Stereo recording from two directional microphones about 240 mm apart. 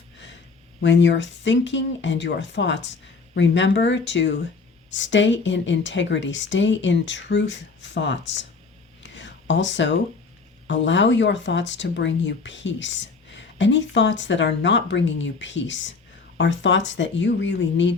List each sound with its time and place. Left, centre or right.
0.8 s speech: left
9.0 s a sound: left
10.7 s speech: left